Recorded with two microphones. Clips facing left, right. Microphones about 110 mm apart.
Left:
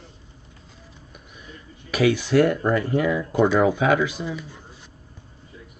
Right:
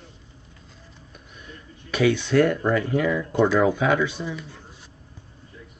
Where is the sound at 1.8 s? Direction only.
5° left (ahead or behind).